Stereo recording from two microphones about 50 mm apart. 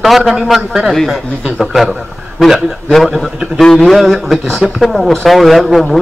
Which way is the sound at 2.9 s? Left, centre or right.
Centre.